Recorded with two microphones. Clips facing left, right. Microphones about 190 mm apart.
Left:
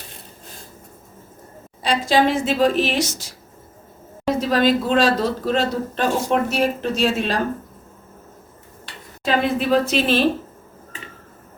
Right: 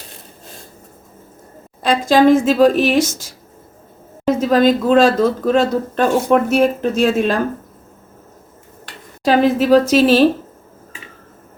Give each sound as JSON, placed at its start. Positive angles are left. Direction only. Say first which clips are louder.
{"t": 1.8, "sound": "speech", "louder": "right 6 dB", "side_deg": -45}
{"t": 4.4, "sound": "speech", "louder": "right 4 dB", "side_deg": -45}
{"t": 9.2, "sound": "a woman's voice", "louder": "right 6 dB", "side_deg": -40}